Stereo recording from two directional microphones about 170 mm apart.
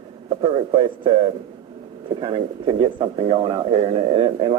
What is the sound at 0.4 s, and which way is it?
Speech, 30° right (ahead or behind).